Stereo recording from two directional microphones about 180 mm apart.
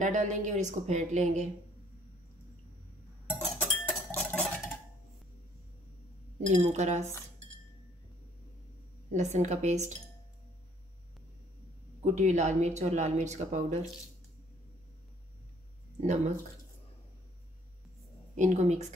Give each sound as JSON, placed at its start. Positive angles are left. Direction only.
{"t": 0.0, "sound": "speech", "side_deg": -45}
{"t": 3.3, "sound": "cutlery", "side_deg": 0}
{"t": 6.4, "sound": "speech", "side_deg": -40}
{"t": 9.1, "sound": "speech", "side_deg": -40}
{"t": 12.0, "sound": "speech", "side_deg": -40}
{"t": 18.3, "sound": "speech", "side_deg": -40}